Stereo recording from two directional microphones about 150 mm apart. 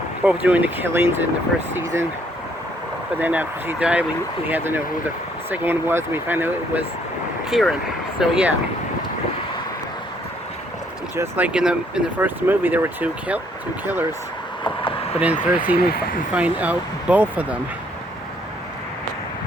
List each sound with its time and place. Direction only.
0.3 s speech: 10° right (ahead or behind)
3.2 s speech: 10° right (ahead or behind)
7.5 s speech: centre (ahead or behind)
11.2 s speech: 10° right (ahead or behind)
14.6 s vehicle: 35° left (ahead or behind)
15.4 s speech: 10° right (ahead or behind)
15.9 s speech: 90° left
16.3 s speech: 10° right (ahead or behind)